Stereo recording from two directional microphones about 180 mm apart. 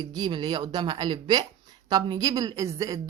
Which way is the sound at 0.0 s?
25° right (ahead or behind).